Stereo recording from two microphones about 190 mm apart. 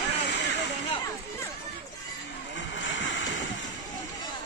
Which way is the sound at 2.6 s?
75° left (ahead or behind).